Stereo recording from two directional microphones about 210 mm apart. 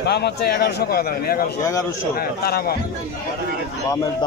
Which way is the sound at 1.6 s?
15° left (ahead or behind).